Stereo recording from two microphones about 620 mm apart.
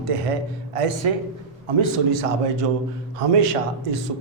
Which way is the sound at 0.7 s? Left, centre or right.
Right.